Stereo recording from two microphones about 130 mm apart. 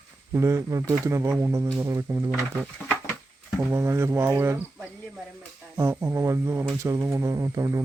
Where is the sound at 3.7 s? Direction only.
20° right (ahead or behind).